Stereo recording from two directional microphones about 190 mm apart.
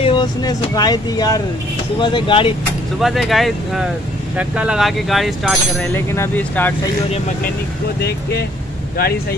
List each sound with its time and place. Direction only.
0.0 s speech: 25° left (ahead or behind)
3.0 s speech: centre (ahead or behind)
5.9 s speech: 10° left (ahead or behind)
8.0 s speech: 55° left (ahead or behind)